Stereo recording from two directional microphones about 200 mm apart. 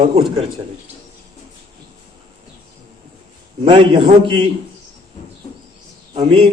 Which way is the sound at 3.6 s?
25° right (ahead or behind).